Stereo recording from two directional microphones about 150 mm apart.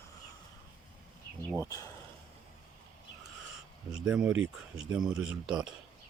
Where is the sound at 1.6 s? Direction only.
25° left (ahead or behind).